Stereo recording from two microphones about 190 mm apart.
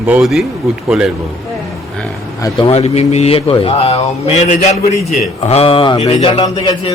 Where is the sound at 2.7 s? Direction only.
35° left (ahead or behind).